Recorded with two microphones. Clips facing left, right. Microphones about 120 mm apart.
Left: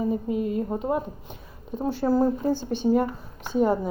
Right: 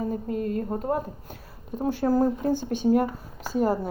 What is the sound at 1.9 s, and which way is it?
Speech, 45° right (ahead or behind).